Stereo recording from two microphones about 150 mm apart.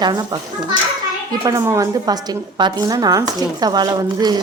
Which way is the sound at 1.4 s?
20° right (ahead or behind).